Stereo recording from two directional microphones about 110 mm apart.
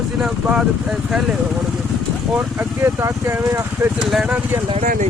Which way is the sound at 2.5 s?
25° right (ahead or behind).